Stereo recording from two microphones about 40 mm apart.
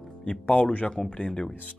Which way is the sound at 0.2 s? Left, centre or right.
Left.